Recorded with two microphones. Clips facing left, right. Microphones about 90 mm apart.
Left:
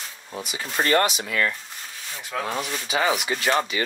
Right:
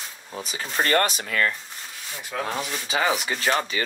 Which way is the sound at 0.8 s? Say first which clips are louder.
Left 1 dB; 40° right (ahead or behind).